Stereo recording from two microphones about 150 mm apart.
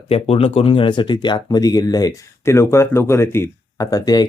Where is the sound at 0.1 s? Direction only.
40° left (ahead or behind).